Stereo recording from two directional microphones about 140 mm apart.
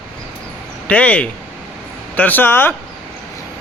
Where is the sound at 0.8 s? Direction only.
10° left (ahead or behind).